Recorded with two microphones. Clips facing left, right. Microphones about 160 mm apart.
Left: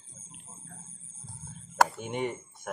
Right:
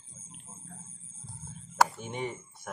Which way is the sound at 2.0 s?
5° left (ahead or behind).